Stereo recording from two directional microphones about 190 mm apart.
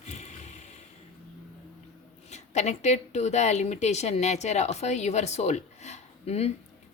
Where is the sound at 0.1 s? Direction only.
40° left (ahead or behind).